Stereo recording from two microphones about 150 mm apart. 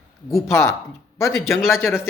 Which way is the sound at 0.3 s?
20° left (ahead or behind).